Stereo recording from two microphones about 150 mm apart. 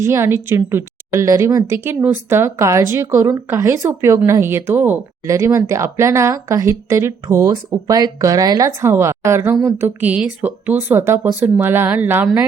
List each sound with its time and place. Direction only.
0.0 s speech: 20° right (ahead or behind)